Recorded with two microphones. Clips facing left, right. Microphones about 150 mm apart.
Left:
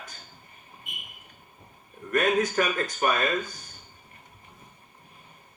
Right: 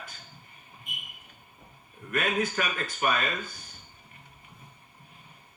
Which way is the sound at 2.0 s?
45° left (ahead or behind).